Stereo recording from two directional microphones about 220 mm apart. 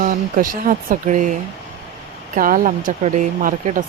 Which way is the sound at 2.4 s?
40° right (ahead or behind).